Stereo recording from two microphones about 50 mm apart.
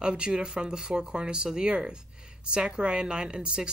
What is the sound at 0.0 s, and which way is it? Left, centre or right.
Speech, centre.